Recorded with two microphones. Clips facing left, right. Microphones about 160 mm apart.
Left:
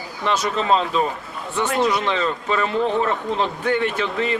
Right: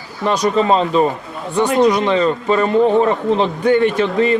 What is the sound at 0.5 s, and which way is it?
Speech, 35° right (ahead or behind).